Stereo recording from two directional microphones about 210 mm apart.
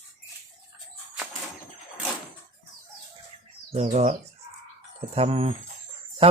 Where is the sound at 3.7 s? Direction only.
35° right (ahead or behind).